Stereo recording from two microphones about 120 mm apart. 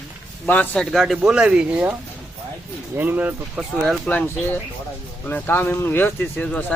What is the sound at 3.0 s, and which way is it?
Speech, 15° right (ahead or behind).